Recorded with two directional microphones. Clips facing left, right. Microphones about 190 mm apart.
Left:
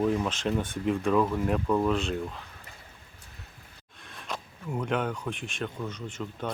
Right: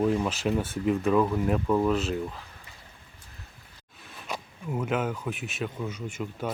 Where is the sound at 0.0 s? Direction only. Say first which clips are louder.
Right 1 dB; 5° right (ahead or behind).